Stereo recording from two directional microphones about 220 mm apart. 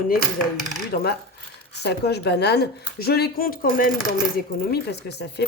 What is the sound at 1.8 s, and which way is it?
Speech, 50° left (ahead or behind).